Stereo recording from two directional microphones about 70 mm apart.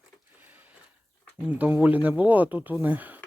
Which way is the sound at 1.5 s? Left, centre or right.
Right.